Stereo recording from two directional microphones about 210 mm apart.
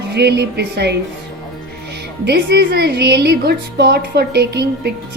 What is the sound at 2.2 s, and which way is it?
A woman's voice, 50° right (ahead or behind).